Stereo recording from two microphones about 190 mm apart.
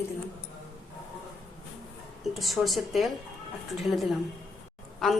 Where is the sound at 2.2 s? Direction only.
Centre (ahead or behind).